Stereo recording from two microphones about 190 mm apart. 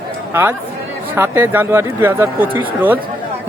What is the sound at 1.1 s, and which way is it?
Speech, 10° right (ahead or behind).